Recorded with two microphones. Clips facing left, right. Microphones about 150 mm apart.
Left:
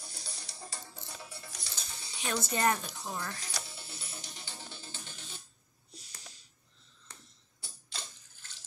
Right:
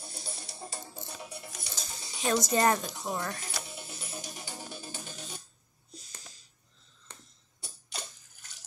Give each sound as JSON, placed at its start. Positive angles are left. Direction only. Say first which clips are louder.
{"t": 0.0, "sound": "music", "louder": "right 5 dB", "side_deg": -25}
{"t": 1.9, "sound": "a sound", "louder": "right 3 dB", "side_deg": -20}
{"t": 2.5, "sound": "a woman's voice", "louder": "right 3 dB", "side_deg": -40}
{"t": 2.8, "sound": "speech", "louder": "right 5 dB", "side_deg": -20}
{"t": 3.5, "sound": "music", "louder": "right 3 dB", "side_deg": -20}
{"t": 4.2, "sound": "music", "louder": "right 6 dB", "side_deg": -50}
{"t": 4.8, "sound": "music", "louder": "right 6 dB", "side_deg": -15}
{"t": 5.1, "sound": "a sound", "louder": "right 6 dB", "side_deg": -45}
{"t": 7.6, "sound": "a sound", "louder": "right 4 dB", "side_deg": -15}